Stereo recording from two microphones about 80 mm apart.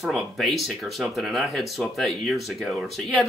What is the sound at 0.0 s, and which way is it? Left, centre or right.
Speech, centre.